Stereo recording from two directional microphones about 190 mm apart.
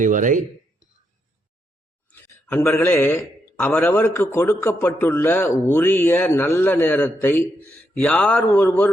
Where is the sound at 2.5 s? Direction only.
15° left (ahead or behind).